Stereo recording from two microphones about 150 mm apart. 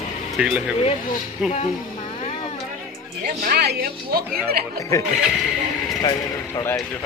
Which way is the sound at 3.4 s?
90° right.